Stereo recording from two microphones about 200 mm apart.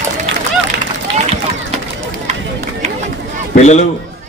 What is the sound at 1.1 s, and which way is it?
Run, 60° right (ahead or behind).